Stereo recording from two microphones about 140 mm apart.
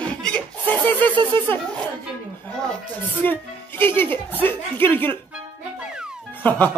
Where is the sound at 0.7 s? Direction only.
15° left (ahead or behind).